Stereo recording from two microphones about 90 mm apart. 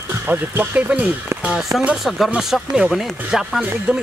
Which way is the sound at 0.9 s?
10° right (ahead or behind).